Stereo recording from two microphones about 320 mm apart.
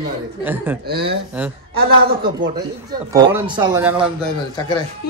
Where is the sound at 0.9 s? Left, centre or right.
Right.